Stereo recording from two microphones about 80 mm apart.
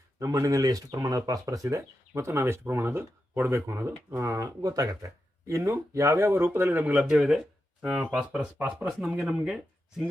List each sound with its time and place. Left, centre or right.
0.2 s speech: right
7.1 s speech: centre
8.2 s speech: centre